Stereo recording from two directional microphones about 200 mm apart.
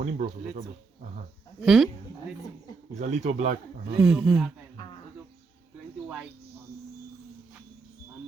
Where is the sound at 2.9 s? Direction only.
35° right (ahead or behind).